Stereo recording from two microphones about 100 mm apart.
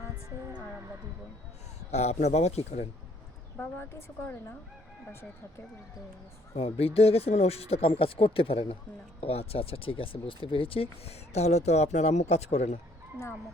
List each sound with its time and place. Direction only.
1.9 s speech: 90° left
3.6 s a woman's voice: 20° left (ahead or behind)
6.5 s speech: 85° left; by 8.6 s 70° left (ahead or behind)
9.2 s speech: 80° left